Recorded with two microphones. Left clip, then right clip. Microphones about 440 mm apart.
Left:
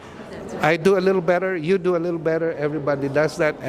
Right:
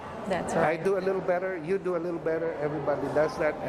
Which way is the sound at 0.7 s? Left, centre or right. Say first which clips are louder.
Left 9 dB; left.